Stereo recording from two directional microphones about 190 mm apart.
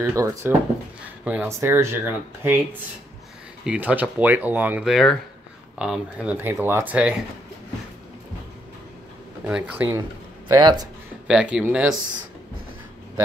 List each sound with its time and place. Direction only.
0.0 s speech: 15° right (ahead or behind)
3.6 s speech: 5° right (ahead or behind)
9.5 s speech: 5° right (ahead or behind)
10.5 s speech: 20° right (ahead or behind)
11.2 s speech: 5° right (ahead or behind)